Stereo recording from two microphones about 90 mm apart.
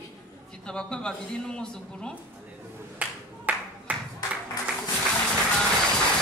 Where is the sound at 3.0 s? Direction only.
15° right (ahead or behind).